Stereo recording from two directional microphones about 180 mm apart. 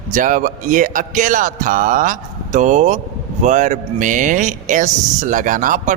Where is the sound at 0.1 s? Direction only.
45° right (ahead or behind).